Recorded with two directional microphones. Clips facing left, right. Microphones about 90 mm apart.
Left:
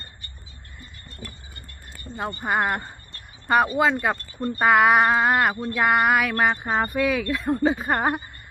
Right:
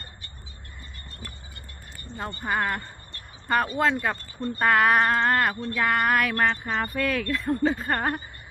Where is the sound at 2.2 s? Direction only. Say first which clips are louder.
Left 3 dB; 15° left (ahead or behind).